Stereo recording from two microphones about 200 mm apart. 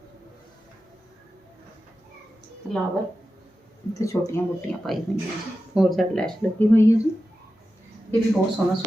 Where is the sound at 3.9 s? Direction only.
15° left (ahead or behind).